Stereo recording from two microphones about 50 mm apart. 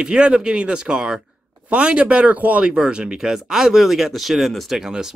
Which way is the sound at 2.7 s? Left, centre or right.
Centre.